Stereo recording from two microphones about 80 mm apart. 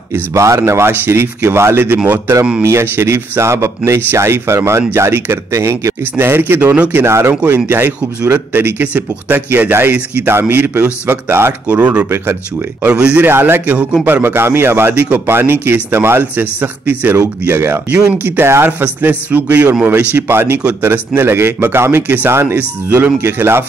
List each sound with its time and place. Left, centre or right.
0.1 s speech: right
11.6 s speech: centre
13.3 s speech: right
15.0 s speech: centre
17.8 s speech: centre
18.2 s speech: right